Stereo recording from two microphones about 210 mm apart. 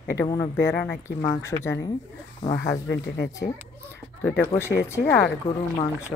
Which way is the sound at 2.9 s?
55° left (ahead or behind).